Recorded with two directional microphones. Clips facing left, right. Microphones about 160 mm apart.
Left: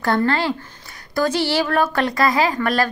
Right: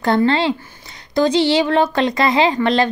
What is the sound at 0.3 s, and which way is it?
Speech, 25° right (ahead or behind).